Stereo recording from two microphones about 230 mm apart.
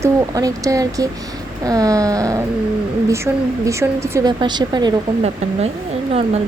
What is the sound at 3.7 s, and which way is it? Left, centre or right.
Speech, centre.